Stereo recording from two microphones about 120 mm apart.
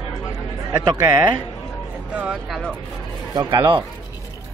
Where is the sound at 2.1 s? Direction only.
10° right (ahead or behind).